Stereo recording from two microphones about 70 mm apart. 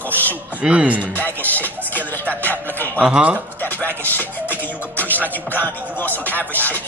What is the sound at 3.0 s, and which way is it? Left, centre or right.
Music, centre.